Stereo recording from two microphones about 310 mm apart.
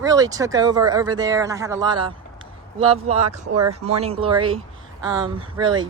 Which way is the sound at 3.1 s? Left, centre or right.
Right.